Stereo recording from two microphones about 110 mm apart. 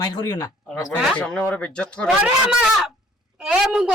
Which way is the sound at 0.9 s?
5° left (ahead or behind).